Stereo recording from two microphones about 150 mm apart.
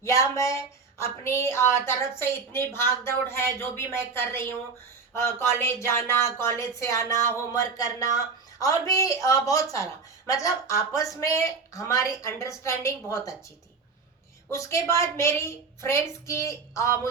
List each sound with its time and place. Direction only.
0.0 s a woman's voice: 20° left (ahead or behind)
14.5 s a woman's voice: 20° left (ahead or behind)